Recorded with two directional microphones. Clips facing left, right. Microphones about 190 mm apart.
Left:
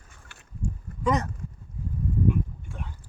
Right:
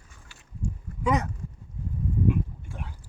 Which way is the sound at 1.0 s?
10° right (ahead or behind).